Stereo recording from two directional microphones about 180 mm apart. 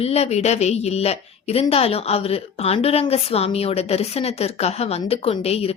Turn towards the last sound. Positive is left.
turn(degrees=35)  # may be behind; listen again after turning